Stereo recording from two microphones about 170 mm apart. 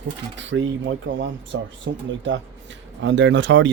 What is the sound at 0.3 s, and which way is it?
Speech, 90° right.